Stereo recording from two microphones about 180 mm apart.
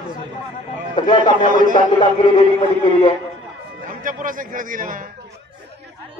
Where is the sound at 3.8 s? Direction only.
45° right (ahead or behind).